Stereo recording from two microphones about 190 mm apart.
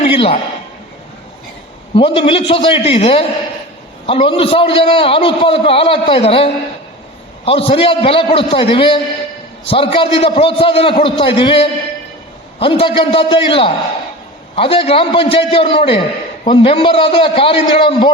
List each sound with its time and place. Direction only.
0.0 s a man's voice: 30° left (ahead or behind)
2.0 s a man's voice: 25° left (ahead or behind)